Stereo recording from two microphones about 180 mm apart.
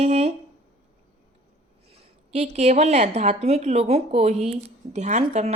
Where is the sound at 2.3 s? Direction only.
35° right (ahead or behind).